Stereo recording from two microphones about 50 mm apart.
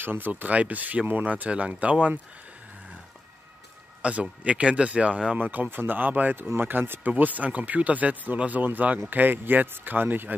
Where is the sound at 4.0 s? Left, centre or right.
Right.